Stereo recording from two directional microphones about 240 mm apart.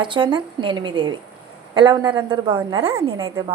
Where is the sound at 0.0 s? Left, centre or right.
Centre.